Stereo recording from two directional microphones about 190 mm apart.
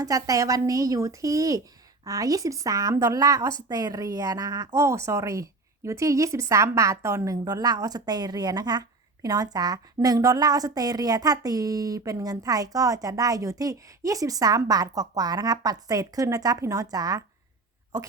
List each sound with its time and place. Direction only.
0.0 s a woman's voice: 20° right (ahead or behind)